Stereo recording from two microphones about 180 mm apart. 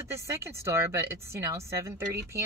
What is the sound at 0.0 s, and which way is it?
A woman's voice, 15° right (ahead or behind).